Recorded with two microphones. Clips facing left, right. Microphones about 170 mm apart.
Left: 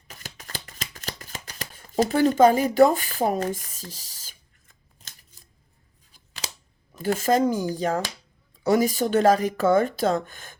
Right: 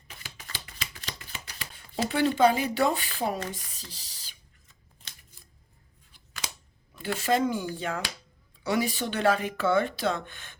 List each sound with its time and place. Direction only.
0.2 s chopping: 45° left (ahead or behind)
6.1 s scissors: 40° left (ahead or behind)
6.9 s speech: 45° left (ahead or behind)